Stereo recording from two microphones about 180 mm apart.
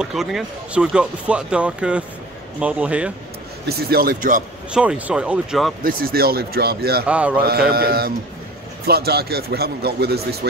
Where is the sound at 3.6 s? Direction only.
55° right (ahead or behind).